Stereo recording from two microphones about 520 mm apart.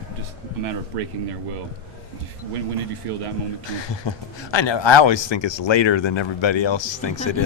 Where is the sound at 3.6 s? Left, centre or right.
Left.